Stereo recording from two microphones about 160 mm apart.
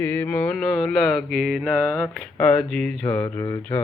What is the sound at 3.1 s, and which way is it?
Speech, 25° left (ahead or behind).